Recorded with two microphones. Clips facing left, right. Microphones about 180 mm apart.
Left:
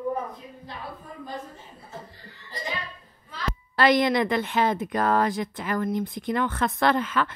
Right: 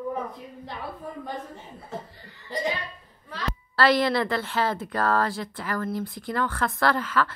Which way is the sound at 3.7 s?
20° left (ahead or behind).